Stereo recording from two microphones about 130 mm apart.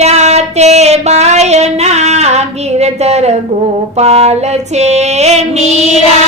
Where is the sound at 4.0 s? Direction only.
50° right (ahead or behind).